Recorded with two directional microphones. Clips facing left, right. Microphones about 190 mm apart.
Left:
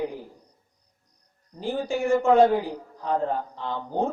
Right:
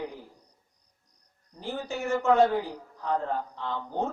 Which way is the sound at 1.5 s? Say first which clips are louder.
Left 6 dB; 15° left (ahead or behind).